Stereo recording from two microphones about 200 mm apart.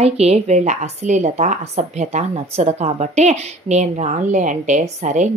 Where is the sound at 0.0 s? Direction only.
30° right (ahead or behind).